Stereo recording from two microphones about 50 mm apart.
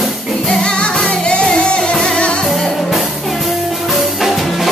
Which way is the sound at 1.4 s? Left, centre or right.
Centre.